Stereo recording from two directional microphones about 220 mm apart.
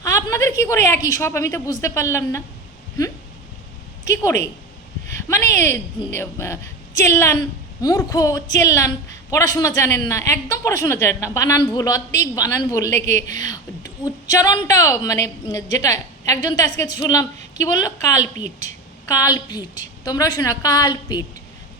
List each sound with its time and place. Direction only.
0.0 s a woman's voice: 15° left (ahead or behind)
5.1 s speech: 10° left (ahead or behind)
18.2 s a woman's voice: 35° right (ahead or behind)
19.0 s speech: 15° left (ahead or behind)